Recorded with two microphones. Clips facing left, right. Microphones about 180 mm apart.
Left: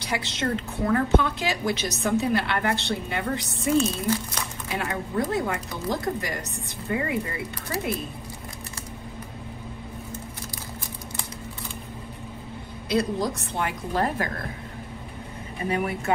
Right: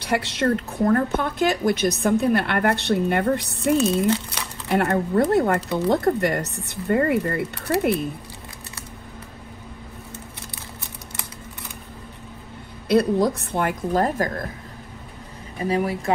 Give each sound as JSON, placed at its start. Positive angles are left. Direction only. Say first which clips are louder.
{"t": 0.0, "sound": "a woman's voice", "louder": "right 6 dB", "side_deg": -60}
{"t": 12.8, "sound": "a woman's voice", "louder": "right 6 dB", "side_deg": -60}
{"t": 15.6, "sound": "speech", "louder": "right 4 dB", "side_deg": -35}